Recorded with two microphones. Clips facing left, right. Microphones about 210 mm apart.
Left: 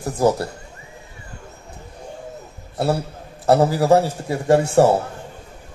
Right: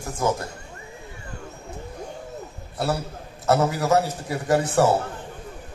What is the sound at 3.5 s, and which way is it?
A man's voice, 30° left (ahead or behind).